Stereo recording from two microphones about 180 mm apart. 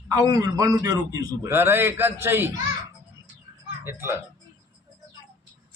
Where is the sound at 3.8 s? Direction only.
15° right (ahead or behind).